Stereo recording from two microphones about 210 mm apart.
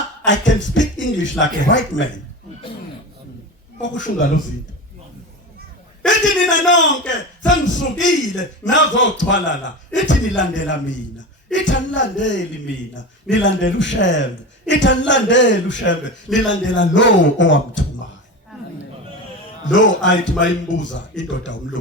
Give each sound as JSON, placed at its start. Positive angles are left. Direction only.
{"t": 0.3, "sound": "a man's voice", "side_deg": 60}
{"t": 3.8, "sound": "speech", "side_deg": 60}
{"t": 6.1, "sound": "a man's voice", "side_deg": 60}
{"t": 19.6, "sound": "a man's voice", "side_deg": 60}